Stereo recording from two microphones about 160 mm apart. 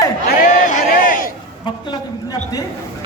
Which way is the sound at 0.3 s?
55° left (ahead or behind).